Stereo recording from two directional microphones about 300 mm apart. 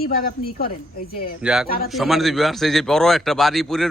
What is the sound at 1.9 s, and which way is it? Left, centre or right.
A man's voice, centre.